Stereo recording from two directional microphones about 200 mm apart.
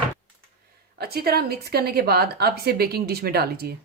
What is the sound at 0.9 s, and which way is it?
A woman's voice, 50° right (ahead or behind).